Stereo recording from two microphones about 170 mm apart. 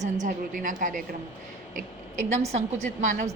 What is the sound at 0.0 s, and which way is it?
A woman's voice, 45° right (ahead or behind).